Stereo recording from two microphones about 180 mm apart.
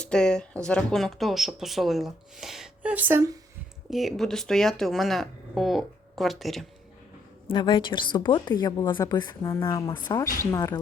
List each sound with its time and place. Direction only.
0.0 s speech: 5° left (ahead or behind); by 3.3 s 15° right (ahead or behind)
3.8 s speech: centre (ahead or behind)
7.4 s a woman's voice: 25° left (ahead or behind)